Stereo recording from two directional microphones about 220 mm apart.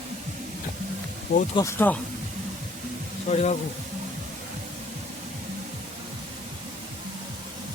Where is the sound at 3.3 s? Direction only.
30° left (ahead or behind).